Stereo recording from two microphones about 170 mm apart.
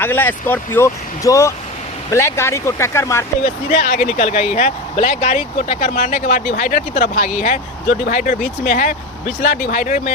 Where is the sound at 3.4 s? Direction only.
50° left (ahead or behind).